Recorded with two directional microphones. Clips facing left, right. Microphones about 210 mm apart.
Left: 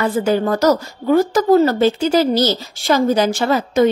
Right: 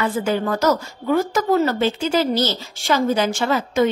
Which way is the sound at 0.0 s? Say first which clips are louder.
Left 4 dB; 35° left (ahead or behind).